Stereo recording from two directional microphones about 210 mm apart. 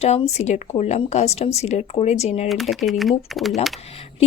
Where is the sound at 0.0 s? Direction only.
30° left (ahead or behind).